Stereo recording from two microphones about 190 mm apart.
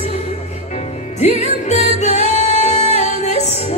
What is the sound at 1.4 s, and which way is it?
Music, 35° left (ahead or behind).